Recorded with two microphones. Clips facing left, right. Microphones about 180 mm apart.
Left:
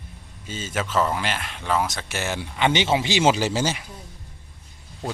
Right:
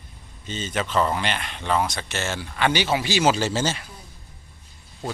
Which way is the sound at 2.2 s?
15° left (ahead or behind).